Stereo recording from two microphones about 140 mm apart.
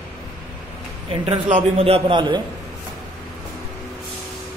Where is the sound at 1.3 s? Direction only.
40° right (ahead or behind).